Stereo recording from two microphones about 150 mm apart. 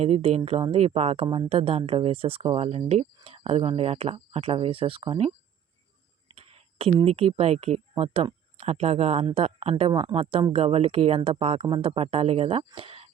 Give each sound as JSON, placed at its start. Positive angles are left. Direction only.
{"t": 0.0, "sound": "speech", "side_deg": -40}
{"t": 6.3, "sound": "speech", "side_deg": -40}